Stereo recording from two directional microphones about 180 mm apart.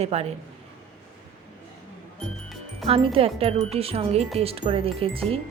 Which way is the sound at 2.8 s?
30° right (ahead or behind).